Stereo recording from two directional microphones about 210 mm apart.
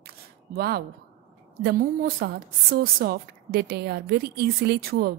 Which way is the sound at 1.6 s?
45° right (ahead or behind).